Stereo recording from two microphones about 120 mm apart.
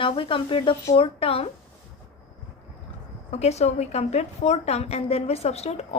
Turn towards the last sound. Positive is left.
turn(degrees=60)  # may be behind; listen again after turning